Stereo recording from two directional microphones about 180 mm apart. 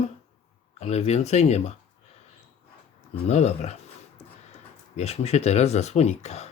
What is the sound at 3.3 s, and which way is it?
Speech, 40° left (ahead or behind).